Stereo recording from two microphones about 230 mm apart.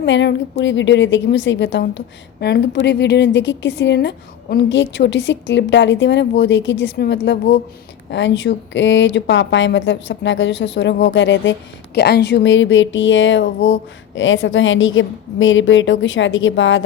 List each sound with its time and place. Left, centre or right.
0.0 s a woman's voice: left